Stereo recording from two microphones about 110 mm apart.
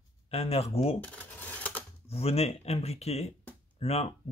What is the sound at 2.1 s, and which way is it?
Speech, 65° left (ahead or behind).